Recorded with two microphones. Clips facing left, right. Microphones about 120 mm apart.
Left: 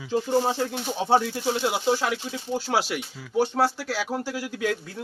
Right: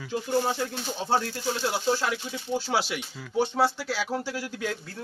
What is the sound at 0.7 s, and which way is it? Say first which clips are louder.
A man's voice: left 5 dB; 15° left (ahead or behind).